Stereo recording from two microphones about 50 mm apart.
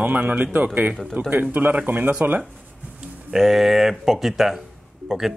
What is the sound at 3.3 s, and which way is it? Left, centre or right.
Speech, centre.